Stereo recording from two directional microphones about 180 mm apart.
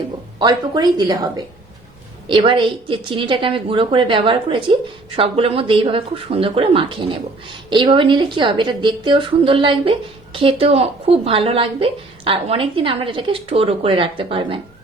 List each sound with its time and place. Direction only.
0.3 s a woman's voice: 25° right (ahead or behind)